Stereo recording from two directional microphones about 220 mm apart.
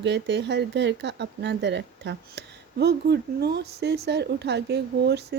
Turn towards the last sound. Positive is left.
turn(degrees=-50)  # may be behind; listen again after turning